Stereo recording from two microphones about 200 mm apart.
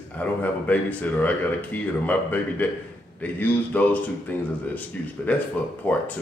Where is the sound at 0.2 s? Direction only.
10° left (ahead or behind).